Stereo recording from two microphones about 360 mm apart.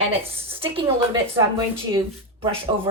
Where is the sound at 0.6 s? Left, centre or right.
Centre.